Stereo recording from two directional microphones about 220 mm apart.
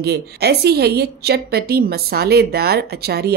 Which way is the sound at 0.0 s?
50° right (ahead or behind).